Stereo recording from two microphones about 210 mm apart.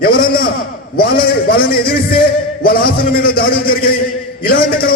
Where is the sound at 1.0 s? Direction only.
45° left (ahead or behind).